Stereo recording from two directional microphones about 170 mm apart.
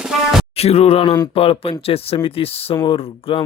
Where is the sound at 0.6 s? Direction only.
35° left (ahead or behind).